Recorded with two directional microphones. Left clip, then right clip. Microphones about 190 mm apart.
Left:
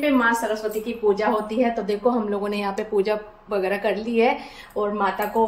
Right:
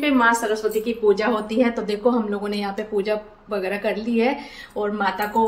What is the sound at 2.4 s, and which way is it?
A woman's voice, 15° left (ahead or behind).